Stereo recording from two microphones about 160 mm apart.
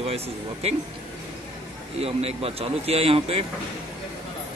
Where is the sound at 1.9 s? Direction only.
40° right (ahead or behind).